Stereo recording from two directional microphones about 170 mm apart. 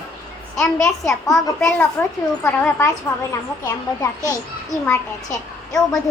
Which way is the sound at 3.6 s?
20° left (ahead or behind).